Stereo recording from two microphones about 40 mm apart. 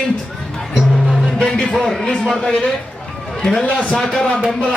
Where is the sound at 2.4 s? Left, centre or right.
Centre.